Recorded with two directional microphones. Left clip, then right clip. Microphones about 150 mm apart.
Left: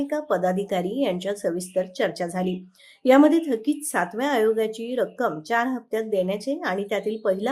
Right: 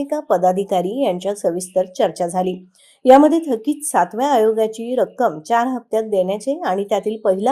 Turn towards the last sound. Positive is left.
turn(degrees=-30)  # may be behind; listen again after turning